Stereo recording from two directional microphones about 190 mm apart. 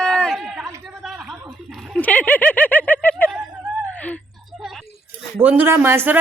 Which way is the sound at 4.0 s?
5° left (ahead or behind).